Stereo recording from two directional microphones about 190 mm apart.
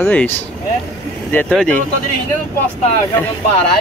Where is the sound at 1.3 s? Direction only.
5° left (ahead or behind).